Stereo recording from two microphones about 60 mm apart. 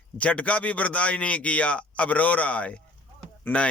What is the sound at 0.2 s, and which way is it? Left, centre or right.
Speech, left.